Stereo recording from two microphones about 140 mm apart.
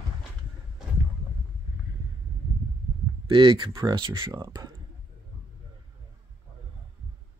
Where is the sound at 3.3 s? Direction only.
35° right (ahead or behind).